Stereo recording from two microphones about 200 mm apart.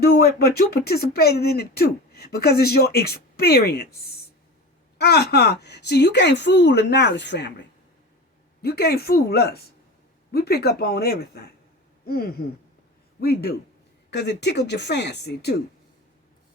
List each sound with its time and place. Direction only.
0.0 s speech: 50° left (ahead or behind)
4.9 s a woman's voice: 55° left (ahead or behind)
8.6 s a man's voice: 50° left (ahead or behind)